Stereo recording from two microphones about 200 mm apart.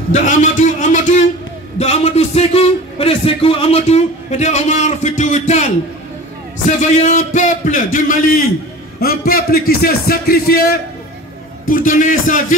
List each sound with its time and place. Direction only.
0.1 s a man's voice: 40° left (ahead or behind)
6.8 s a man's voice: 35° left (ahead or behind)